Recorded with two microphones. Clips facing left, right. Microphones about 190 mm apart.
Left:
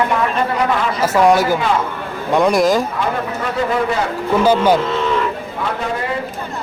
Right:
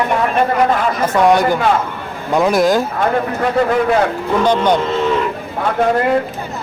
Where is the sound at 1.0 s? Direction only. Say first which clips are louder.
Left 1 dB; 5° left (ahead or behind).